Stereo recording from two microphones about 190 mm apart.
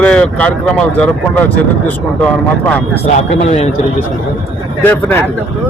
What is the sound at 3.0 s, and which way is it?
Speech, 35° left (ahead or behind).